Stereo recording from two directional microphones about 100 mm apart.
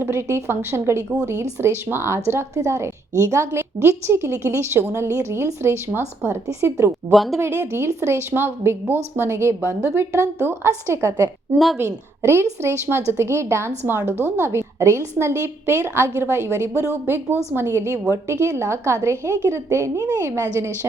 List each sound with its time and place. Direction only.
0.0 s a woman's voice: 25° right (ahead or behind)
7.1 s speech: centre (ahead or behind)
7.3 s a woman's voice: 25° right (ahead or behind)